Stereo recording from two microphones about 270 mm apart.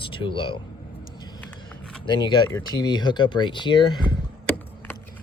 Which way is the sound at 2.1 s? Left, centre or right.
Centre.